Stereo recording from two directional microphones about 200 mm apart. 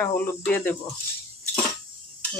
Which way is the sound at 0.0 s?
10° left (ahead or behind).